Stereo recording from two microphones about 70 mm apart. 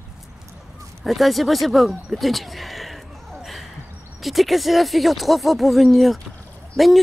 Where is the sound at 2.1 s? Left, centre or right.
Centre.